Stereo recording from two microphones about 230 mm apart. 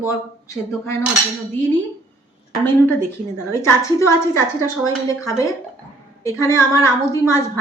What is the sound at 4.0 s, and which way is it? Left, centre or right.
A woman's voice, centre.